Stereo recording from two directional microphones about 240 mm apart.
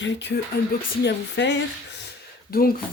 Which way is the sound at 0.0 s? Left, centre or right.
Left.